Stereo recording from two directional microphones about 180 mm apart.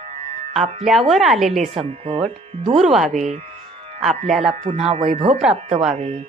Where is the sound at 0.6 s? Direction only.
35° right (ahead or behind).